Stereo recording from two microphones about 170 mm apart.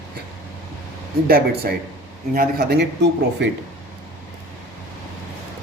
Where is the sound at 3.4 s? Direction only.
90° right.